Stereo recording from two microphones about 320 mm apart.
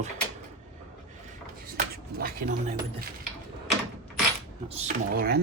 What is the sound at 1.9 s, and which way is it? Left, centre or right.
Speech, right.